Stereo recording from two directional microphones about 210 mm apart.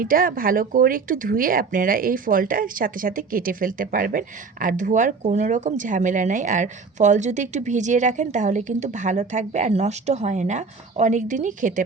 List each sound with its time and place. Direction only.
0.0 s speech: 40° right (ahead or behind)